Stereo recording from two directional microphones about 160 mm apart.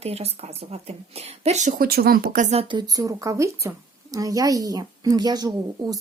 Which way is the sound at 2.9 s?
20° right (ahead or behind).